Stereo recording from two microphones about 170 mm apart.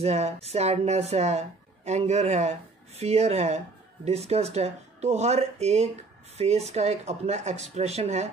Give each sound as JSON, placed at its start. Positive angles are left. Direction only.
{"t": 0.0, "sound": "speech", "side_deg": -40}